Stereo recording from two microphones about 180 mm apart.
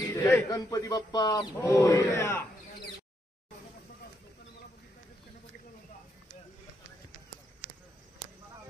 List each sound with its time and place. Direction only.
0.1 s speech: 15° left (ahead or behind)